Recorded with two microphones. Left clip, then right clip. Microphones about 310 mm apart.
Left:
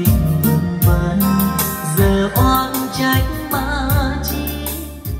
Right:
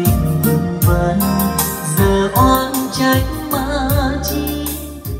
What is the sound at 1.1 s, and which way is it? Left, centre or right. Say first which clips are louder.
Music: right 1 dB; right.